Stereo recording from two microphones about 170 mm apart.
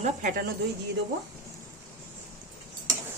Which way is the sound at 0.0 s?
50° right (ahead or behind).